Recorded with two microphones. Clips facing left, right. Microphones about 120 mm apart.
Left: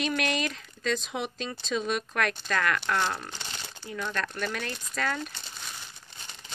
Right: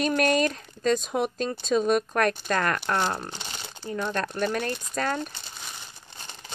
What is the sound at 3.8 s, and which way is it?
Speech, 40° right (ahead or behind).